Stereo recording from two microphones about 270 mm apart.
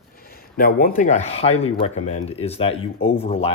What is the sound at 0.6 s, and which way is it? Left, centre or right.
Speech, left.